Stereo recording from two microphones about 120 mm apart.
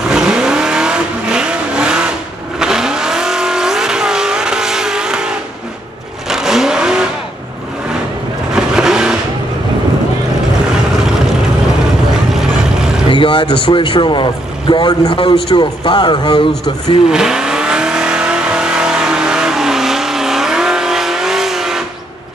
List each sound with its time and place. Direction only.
0.1 s vehicle: 5° right (ahead or behind)
8.5 s vehicle: 5° right (ahead or behind)
12.4 s vehicle: 5° right (ahead or behind)
13.1 s speech: 45° left (ahead or behind)
17.1 s vehicle: 5° right (ahead or behind)